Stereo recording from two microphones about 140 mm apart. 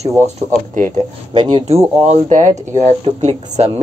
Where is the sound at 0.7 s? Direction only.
65° right (ahead or behind).